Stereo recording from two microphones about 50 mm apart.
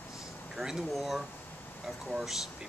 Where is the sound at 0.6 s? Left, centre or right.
Centre.